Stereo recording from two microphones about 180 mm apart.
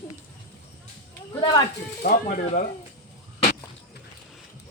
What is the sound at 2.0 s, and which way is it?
Speech, 50° left (ahead or behind).